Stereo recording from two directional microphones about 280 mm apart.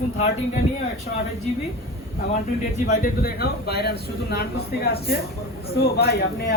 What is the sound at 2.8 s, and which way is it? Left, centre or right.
Speech, left.